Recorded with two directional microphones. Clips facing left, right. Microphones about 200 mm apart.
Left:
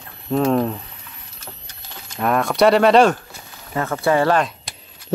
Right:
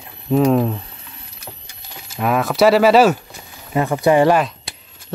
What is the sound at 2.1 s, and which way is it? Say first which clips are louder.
Speech: right 1 dB; 5° right (ahead or behind).